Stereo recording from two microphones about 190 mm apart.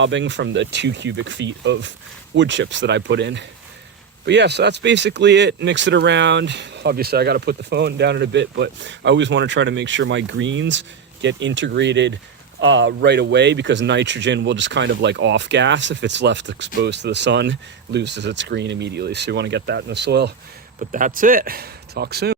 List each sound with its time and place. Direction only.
0.0 s speech: 75° right (ahead or behind)
20.7 s speech: 45° right (ahead or behind)